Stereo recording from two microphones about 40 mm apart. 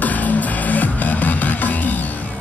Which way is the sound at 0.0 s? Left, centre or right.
Left.